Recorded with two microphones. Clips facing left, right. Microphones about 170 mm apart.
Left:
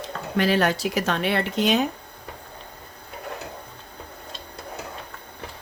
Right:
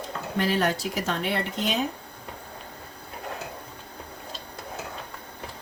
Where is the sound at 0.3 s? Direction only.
75° left (ahead or behind).